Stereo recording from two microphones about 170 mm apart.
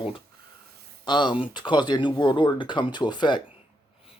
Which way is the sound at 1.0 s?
25° left (ahead or behind).